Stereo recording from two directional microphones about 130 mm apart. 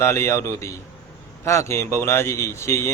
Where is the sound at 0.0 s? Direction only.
20° left (ahead or behind).